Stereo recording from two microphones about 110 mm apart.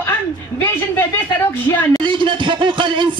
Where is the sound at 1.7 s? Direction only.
25° left (ahead or behind).